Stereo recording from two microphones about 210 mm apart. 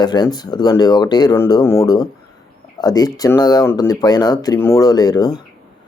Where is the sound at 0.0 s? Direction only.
20° left (ahead or behind).